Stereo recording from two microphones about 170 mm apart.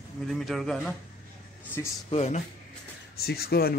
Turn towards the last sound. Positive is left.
turn(degrees=65)  # may be behind; listen again after turning